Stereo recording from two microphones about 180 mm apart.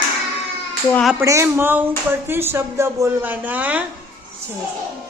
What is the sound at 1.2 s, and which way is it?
Speech, 15° right (ahead or behind).